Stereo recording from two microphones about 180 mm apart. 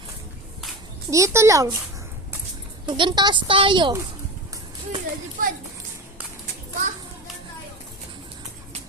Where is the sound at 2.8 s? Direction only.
25° right (ahead or behind).